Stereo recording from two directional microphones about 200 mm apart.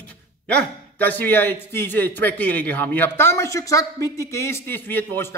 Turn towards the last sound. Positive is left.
turn(degrees=10)  # may be behind; listen again after turning